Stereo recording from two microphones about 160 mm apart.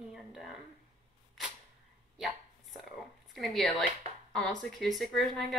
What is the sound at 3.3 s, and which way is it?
A woman's voice, centre (ahead or behind).